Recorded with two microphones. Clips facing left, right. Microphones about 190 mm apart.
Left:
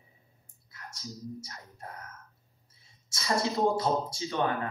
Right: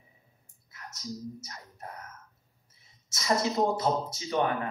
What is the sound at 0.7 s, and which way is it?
Music, 30° left (ahead or behind).